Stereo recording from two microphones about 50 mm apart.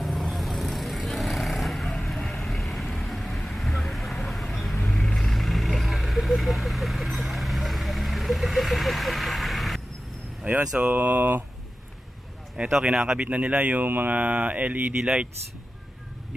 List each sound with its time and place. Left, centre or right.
0.0 s vehicle: centre
10.4 s vehicle: right
10.9 s speech: right
12.6 s speech: right
12.9 s speech: centre
13.2 s speech: right